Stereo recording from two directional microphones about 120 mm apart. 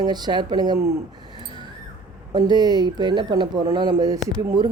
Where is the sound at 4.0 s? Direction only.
30° right (ahead or behind).